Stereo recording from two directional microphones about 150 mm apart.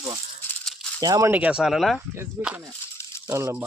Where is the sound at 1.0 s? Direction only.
20° right (ahead or behind).